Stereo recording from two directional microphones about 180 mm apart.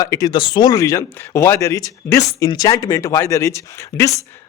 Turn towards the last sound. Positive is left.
turn(degrees=15)  # may be behind; listen again after turning